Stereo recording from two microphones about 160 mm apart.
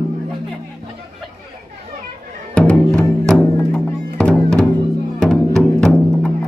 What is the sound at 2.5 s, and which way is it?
Music, 5° left (ahead or behind).